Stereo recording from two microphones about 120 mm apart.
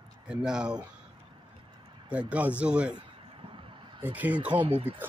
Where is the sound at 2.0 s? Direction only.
10° right (ahead or behind).